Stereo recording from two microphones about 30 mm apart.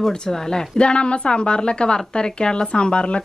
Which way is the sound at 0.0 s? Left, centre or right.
Left.